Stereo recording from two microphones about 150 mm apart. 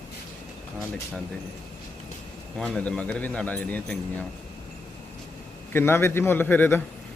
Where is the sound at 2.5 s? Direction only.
5° left (ahead or behind).